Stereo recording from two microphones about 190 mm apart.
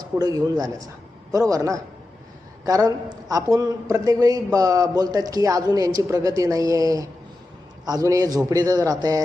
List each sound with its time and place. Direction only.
0.0 s a man's voice: 20° right (ahead or behind)